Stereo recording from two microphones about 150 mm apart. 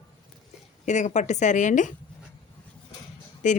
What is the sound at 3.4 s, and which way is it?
Speech, 55° left (ahead or behind).